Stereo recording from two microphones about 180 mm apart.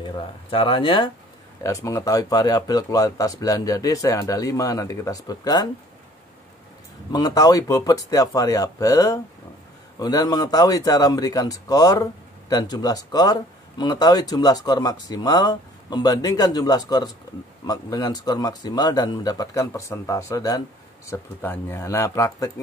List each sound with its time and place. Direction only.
0.0 s speech: 30° left (ahead or behind)
7.1 s speech: 20° left (ahead or behind)